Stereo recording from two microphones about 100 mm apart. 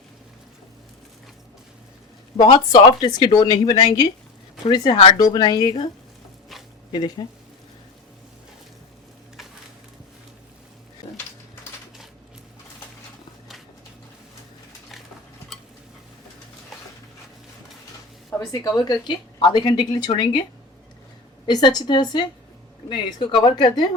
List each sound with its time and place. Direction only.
2.4 s a woman's voice: 45° left (ahead or behind)
6.9 s a woman's voice: 50° left (ahead or behind)
18.3 s a woman's voice: 40° left (ahead or behind)
21.4 s a woman's voice: 45° left (ahead or behind)